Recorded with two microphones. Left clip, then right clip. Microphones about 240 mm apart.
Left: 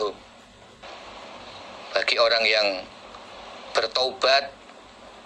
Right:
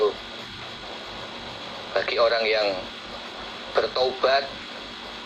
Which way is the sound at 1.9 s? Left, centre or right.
Left.